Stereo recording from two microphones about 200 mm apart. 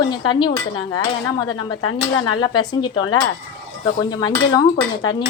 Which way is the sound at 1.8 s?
90° left.